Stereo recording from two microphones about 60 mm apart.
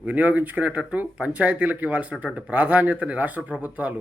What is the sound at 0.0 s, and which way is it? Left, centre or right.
Speech, right.